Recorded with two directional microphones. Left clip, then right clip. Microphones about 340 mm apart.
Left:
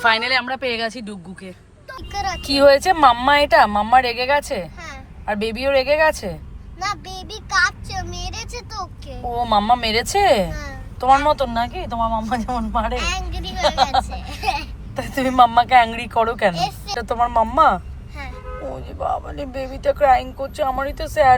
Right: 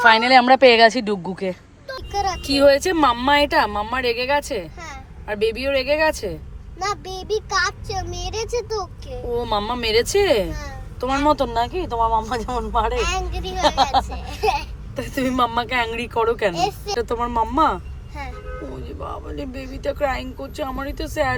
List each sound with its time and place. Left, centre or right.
0.0 s speech: centre
2.1 s a sound: right
2.4 s speech: centre
6.7 s speech: right
9.3 s speech: centre
10.5 s a child's voice: right
14.9 s speech: centre
16.6 s speech: right
17.0 s speech: centre
18.9 s speech: centre